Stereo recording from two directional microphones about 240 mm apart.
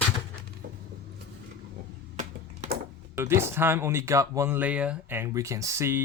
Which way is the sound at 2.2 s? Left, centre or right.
Right.